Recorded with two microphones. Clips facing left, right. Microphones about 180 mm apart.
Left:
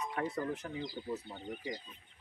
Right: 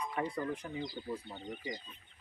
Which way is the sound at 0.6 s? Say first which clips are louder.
Even; 10° right (ahead or behind).